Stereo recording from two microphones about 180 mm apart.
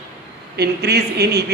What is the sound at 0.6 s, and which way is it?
Speech, 65° right (ahead or behind).